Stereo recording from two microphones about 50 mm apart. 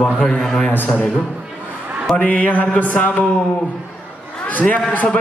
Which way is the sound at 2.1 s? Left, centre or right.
Left.